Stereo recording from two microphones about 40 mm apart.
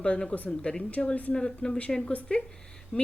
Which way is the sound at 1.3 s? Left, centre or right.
Centre.